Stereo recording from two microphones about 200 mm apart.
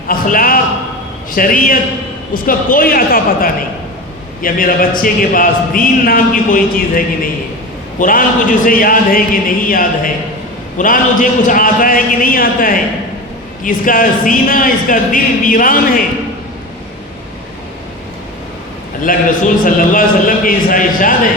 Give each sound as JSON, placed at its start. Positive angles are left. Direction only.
{"t": 0.1, "sound": "a man's voice", "side_deg": 45}
{"t": 19.1, "sound": "a man's voice", "side_deg": 45}